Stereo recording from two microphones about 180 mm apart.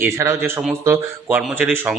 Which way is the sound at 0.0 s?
15° right (ahead or behind).